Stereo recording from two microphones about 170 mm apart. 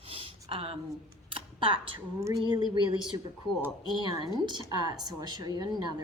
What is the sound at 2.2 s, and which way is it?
Speech, 20° right (ahead or behind).